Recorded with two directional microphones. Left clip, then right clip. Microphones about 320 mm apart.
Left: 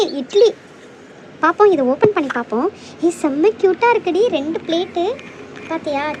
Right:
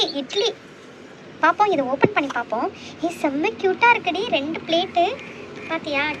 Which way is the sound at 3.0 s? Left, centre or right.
Centre.